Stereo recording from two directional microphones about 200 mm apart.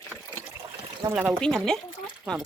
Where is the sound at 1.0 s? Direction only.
10° right (ahead or behind).